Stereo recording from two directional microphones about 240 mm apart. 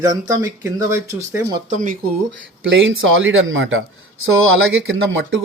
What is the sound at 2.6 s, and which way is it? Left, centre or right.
Speech, right.